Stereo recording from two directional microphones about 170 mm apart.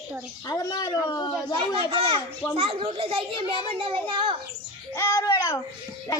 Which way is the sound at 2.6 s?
35° right (ahead or behind).